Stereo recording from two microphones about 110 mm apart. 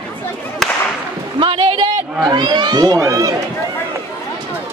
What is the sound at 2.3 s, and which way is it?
Speech, 40° right (ahead or behind).